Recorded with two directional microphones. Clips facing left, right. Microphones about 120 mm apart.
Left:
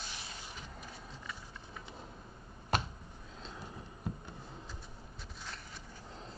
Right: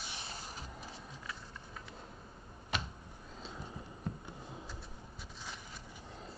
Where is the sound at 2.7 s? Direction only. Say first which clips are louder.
Left 6 dB; 40° left (ahead or behind).